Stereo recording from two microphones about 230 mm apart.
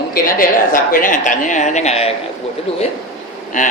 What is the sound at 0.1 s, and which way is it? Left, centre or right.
A man's voice, left.